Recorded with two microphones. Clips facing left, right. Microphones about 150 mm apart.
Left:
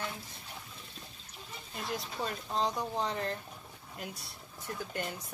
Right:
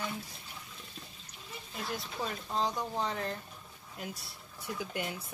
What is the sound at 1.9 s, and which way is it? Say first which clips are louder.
Speech: left 1 dB; centre (ahead or behind).